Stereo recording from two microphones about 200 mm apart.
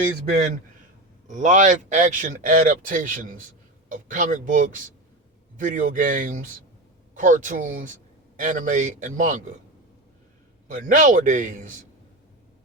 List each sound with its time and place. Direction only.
1.3 s speech: 40° right (ahead or behind)
10.7 s speech: 40° right (ahead or behind)